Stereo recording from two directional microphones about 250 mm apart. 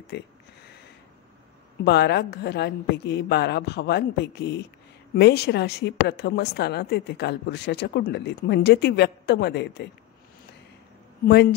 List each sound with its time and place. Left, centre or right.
0.1 s speech: left
1.9 s a woman's voice: left
11.2 s a woman's voice: left